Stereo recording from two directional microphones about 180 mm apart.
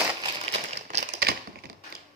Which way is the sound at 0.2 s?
35° right (ahead or behind).